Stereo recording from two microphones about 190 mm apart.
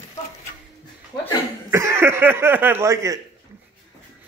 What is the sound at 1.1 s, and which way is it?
Speech, 25° left (ahead or behind).